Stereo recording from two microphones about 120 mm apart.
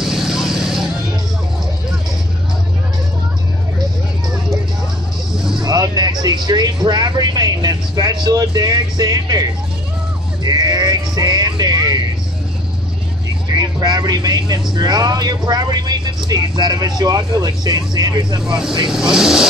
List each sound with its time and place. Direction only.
0.0 s vehicle: 5° right (ahead or behind)
5.6 s speech: 35° right (ahead or behind)
10.4 s sheep: 30° right (ahead or behind)
13.5 s speech: 30° right (ahead or behind)
18.9 s speech: 5° right (ahead or behind)